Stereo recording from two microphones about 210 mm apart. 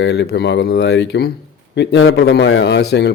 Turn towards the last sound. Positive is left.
turn(degrees=55)  # may be behind; listen again after turning